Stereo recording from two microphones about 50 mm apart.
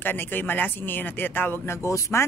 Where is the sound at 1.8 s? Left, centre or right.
Left.